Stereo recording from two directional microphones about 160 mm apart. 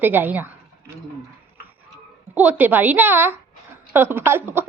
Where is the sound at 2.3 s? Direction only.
10° right (ahead or behind).